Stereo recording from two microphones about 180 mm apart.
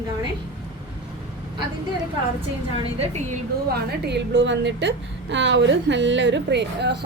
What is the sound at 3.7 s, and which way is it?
A woman's voice, 65° right (ahead or behind).